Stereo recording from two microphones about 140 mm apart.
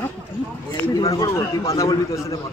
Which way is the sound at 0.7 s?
25° left (ahead or behind).